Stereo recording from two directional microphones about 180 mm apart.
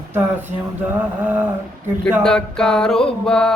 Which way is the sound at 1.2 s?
10° right (ahead or behind).